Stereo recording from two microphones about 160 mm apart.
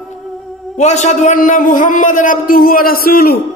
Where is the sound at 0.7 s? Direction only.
45° left (ahead or behind); by 3.3 s 70° left (ahead or behind).